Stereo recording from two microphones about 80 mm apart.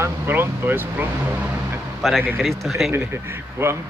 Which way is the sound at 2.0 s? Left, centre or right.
Centre.